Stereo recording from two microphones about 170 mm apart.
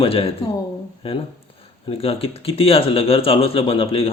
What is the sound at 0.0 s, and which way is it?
Speech, 35° left (ahead or behind).